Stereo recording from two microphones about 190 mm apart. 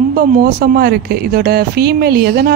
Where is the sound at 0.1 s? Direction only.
50° right (ahead or behind).